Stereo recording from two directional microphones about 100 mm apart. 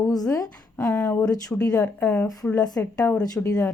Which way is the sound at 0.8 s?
10° left (ahead or behind).